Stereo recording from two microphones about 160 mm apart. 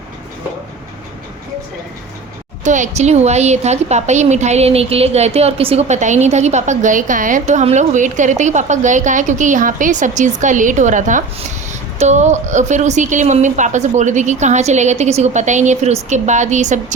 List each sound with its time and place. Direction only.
2.6 s a woman's voice: 50° right (ahead or behind)